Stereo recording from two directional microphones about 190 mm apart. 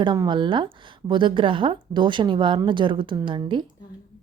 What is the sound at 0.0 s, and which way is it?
A woman's voice, 25° right (ahead or behind).